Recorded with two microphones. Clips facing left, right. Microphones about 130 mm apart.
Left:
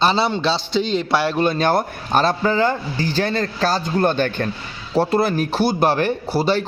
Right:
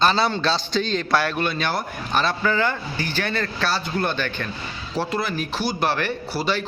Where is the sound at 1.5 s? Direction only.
45° left (ahead or behind).